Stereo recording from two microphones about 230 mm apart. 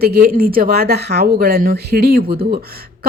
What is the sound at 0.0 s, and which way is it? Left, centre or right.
Speech, right.